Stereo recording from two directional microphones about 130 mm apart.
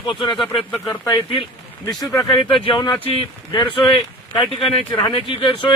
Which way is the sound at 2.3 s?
40° left (ahead or behind).